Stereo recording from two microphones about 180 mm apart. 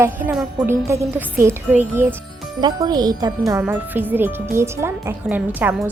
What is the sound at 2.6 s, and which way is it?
Speech, 20° right (ahead or behind).